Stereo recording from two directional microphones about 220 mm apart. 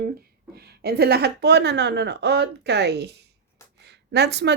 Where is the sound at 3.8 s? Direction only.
50° right (ahead or behind).